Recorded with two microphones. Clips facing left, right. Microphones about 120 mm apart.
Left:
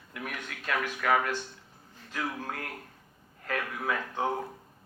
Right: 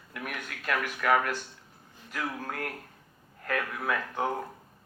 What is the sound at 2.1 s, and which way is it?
Speech, 30° left (ahead or behind).